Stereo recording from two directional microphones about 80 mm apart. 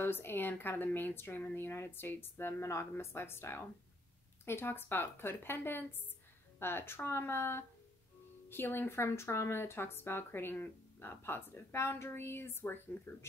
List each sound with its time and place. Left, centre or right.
0.0 s speech: left